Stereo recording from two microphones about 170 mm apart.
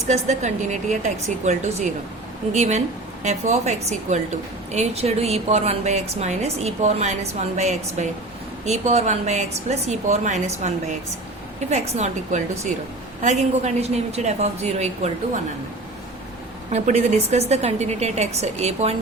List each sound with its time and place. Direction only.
0.1 s a woman's voice: 45° right (ahead or behind)
16.7 s a woman's voice: 40° right (ahead or behind)